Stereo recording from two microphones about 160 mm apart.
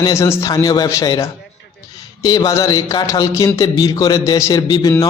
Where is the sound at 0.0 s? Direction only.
20° left (ahead or behind).